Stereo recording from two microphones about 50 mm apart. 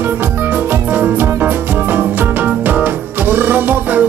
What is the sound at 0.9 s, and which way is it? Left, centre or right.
Music, right.